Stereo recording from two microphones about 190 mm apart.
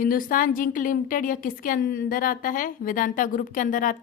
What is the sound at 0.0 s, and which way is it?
A woman's voice, 45° left (ahead or behind).